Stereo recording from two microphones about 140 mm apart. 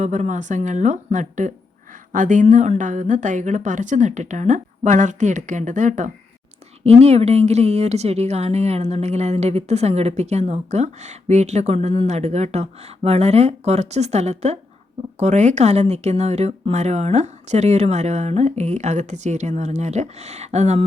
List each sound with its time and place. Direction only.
0.0 s a woman's voice: 55° right (ahead or behind)
6.8 s a woman's voice: 50° right (ahead or behind)